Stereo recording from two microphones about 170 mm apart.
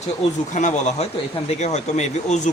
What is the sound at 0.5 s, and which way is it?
Speech, 45° left (ahead or behind).